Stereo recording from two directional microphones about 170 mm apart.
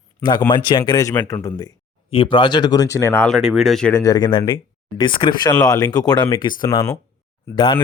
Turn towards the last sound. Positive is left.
turn(degrees=30)  # may be behind; listen again after turning